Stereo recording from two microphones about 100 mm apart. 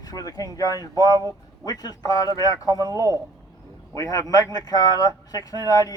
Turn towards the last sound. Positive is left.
turn(degrees=35)  # may be behind; listen again after turning